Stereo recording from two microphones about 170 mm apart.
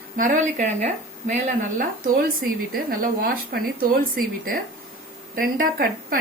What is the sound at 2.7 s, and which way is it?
Speech, 60° right (ahead or behind).